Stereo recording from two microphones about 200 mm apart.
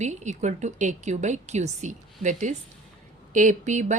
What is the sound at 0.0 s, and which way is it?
A woman's voice, 35° right (ahead or behind).